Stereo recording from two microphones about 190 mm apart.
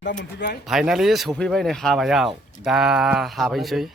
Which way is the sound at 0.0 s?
65° left (ahead or behind).